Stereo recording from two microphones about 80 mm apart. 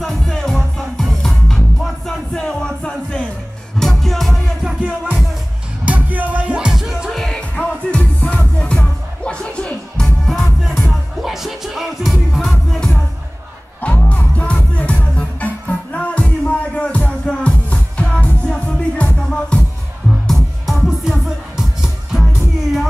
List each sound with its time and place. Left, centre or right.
0.0 s music: centre
4.6 s music: centre
7.5 s music: centre
10.2 s music: centre
13.7 s music: centre
20.6 s music: centre